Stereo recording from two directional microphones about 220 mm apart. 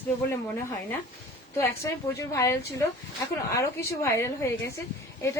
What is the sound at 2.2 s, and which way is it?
A woman's voice, 15° left (ahead or behind).